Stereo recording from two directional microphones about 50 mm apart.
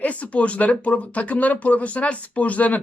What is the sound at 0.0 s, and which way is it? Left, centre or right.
Speech, left.